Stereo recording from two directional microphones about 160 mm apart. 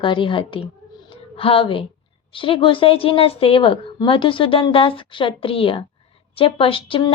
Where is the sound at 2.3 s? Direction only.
35° left (ahead or behind).